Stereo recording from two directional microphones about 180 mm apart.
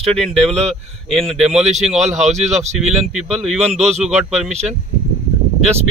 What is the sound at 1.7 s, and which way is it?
Speech, 40° right (ahead or behind).